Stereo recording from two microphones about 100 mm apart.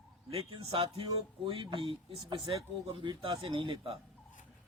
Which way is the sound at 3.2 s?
65° right (ahead or behind).